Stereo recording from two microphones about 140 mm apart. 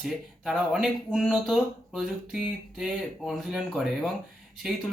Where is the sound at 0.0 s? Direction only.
Centre (ahead or behind).